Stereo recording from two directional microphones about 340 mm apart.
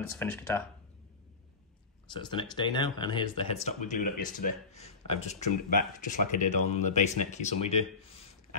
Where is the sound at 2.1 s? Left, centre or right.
Centre.